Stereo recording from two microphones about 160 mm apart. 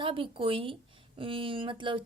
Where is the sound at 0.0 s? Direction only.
35° right (ahead or behind).